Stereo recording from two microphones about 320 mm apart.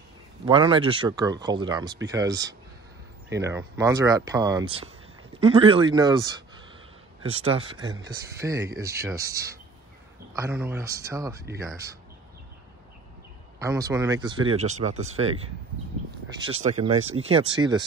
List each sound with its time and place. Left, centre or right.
0.5 s speech: centre
7.4 s speech: centre
13.6 s speech: centre
16.3 s speech: centre